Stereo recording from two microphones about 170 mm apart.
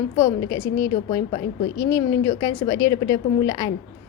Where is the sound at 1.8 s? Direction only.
20° left (ahead or behind).